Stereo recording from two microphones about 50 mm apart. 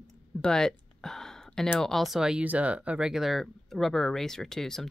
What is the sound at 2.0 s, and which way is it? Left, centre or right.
Speech, centre.